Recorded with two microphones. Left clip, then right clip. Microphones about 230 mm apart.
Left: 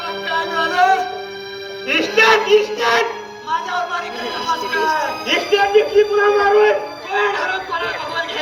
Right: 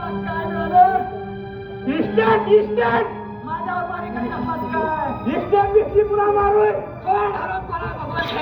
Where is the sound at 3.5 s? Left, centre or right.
Left.